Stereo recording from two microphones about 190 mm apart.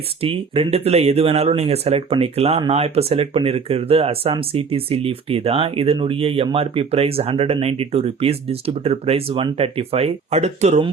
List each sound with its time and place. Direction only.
0.2 s speech: 30° right (ahead or behind)